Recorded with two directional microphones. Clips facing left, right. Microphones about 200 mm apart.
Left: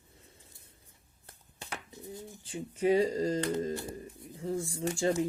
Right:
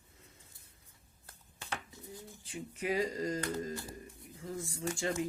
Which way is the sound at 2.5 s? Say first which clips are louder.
Left 8 dB; 30° left (ahead or behind).